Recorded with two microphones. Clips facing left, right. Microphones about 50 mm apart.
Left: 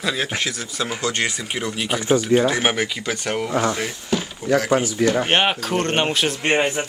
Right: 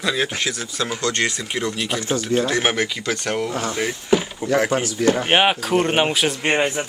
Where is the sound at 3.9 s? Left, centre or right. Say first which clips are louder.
Right 5 dB; centre.